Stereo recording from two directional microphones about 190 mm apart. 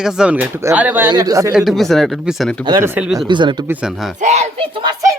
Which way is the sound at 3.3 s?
25° right (ahead or behind).